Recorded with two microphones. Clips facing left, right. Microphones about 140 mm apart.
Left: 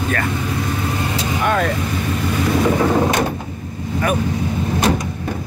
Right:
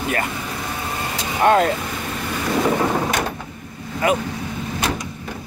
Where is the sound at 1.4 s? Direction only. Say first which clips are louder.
Right 4 dB; 30° right (ahead or behind).